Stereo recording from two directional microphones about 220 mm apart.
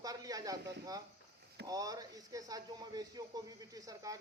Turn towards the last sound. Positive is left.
turn(degrees=-15)  # may be behind; listen again after turning